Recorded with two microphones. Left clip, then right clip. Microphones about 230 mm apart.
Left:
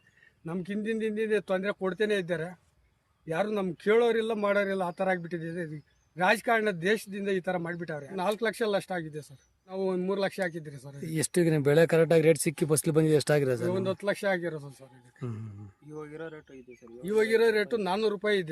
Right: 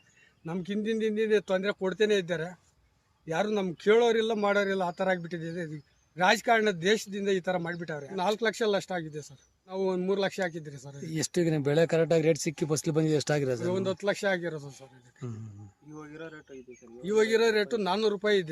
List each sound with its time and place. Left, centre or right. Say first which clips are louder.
0.4 s a man's voice: right 1 dB; centre
11.0 s speech: left 2 dB; centre
13.7 s a man's voice: even; centre
15.2 s speech: left 2 dB; centre
15.9 s speech: left 3 dB; left
17.0 s a man's voice: even; centre